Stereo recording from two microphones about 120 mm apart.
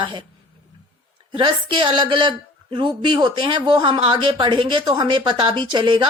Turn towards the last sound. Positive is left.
turn(degrees=-40)  # may be behind; listen again after turning